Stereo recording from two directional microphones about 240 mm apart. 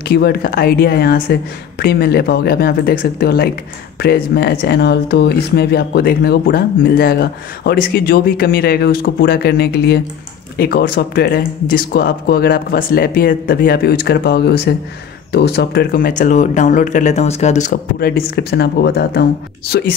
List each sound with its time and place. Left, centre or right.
0.1 s speech: left